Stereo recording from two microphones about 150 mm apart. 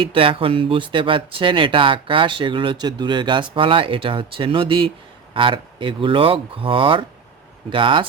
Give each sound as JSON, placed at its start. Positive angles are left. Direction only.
{"t": 0.0, "sound": "speech", "side_deg": -35}